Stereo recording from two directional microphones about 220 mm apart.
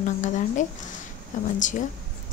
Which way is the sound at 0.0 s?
35° left (ahead or behind).